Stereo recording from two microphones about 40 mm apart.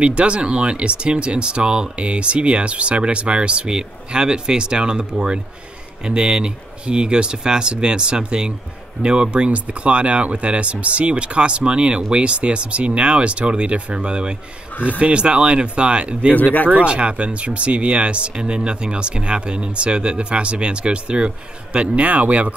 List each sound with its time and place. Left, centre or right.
0.0 s speech: right